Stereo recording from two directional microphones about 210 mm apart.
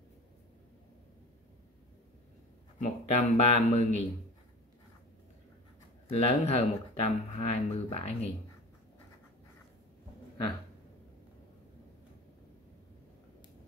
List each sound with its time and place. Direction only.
2.8 s speech: 35° left (ahead or behind)
6.0 s speech: 30° left (ahead or behind)